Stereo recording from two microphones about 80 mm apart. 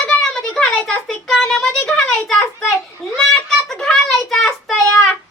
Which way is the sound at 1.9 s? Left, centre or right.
Centre.